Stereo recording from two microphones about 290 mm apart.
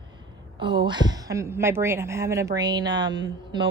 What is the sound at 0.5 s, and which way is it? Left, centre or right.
A woman's voice, centre.